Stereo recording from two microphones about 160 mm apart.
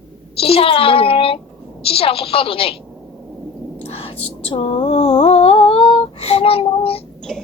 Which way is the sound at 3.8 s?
40° left (ahead or behind).